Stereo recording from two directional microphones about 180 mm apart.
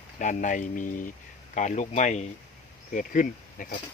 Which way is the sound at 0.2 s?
45° left (ahead or behind).